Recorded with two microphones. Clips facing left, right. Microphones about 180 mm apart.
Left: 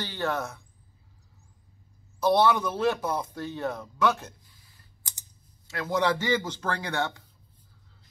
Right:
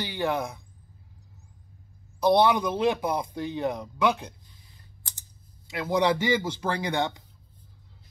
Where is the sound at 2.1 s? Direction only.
15° right (ahead or behind).